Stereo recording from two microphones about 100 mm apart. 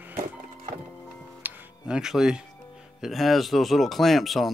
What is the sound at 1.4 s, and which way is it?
Music, 20° right (ahead or behind).